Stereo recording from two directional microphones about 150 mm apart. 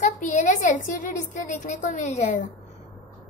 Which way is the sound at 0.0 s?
55° left (ahead or behind).